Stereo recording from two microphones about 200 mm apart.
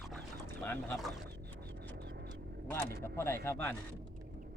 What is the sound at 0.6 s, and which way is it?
Speech, 10° left (ahead or behind).